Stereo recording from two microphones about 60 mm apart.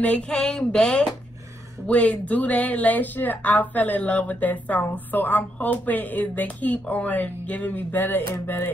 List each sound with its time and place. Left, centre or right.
0.0 s speech: left
1.9 s speech: left